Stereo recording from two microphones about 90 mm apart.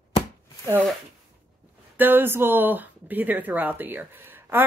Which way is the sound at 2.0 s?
20° right (ahead or behind).